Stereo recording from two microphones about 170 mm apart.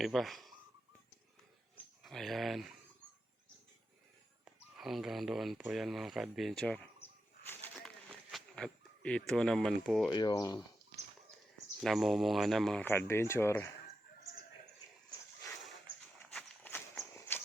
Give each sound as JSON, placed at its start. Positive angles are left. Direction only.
{"t": 0.0, "sound": "speech", "side_deg": 0}
{"t": 2.0, "sound": "speech", "side_deg": 0}
{"t": 4.8, "sound": "speech", "side_deg": 0}
{"t": 7.4, "sound": "a sound", "side_deg": 10}
{"t": 8.3, "sound": "speech", "side_deg": 0}
{"t": 10.1, "sound": "speech", "side_deg": 25}
{"t": 11.8, "sound": "speech", "side_deg": 0}
{"t": 16.3, "sound": "walk", "side_deg": 10}